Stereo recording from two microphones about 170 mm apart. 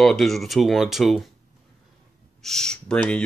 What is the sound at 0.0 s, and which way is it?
Speech, centre (ahead or behind).